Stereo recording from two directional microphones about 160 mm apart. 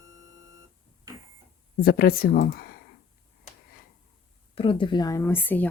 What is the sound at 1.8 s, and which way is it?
Speech, 70° left (ahead or behind).